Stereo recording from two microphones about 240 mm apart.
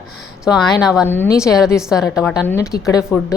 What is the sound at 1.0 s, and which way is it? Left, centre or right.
Speech, centre.